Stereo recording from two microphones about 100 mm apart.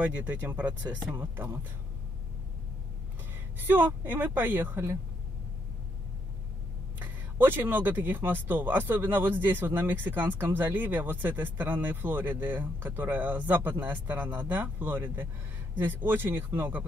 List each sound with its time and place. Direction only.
0.0 s speech: 15° right (ahead or behind)
3.5 s speech: 20° right (ahead or behind)
7.0 s speech: 20° right (ahead or behind)